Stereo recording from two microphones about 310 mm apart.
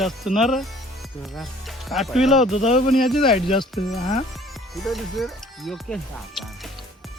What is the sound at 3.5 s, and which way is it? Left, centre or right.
Speech, centre.